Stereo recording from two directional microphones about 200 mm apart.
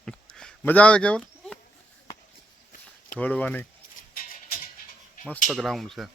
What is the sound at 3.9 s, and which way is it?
Music, 45° left (ahead or behind).